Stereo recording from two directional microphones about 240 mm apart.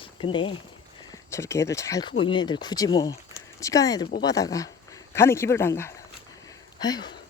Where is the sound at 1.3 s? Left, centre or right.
Centre.